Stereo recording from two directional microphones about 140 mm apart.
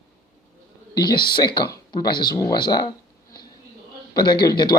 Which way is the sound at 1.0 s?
30° left (ahead or behind).